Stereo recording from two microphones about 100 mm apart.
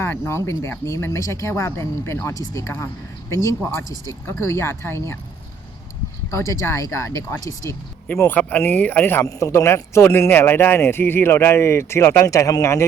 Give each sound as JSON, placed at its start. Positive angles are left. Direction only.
{"t": 0.0, "sound": "speech", "side_deg": 25}
{"t": 6.3, "sound": "speech", "side_deg": 30}
{"t": 8.0, "sound": "speech", "side_deg": 15}
{"t": 9.2, "sound": "speech", "side_deg": 30}